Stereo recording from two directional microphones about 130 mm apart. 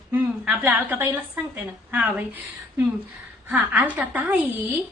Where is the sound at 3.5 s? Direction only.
10° right (ahead or behind).